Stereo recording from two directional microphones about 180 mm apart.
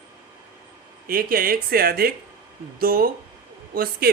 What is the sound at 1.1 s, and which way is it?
Speech, 55° right (ahead or behind).